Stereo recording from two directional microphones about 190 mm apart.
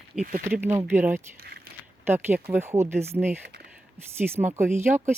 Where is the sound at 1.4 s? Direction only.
55° right (ahead or behind).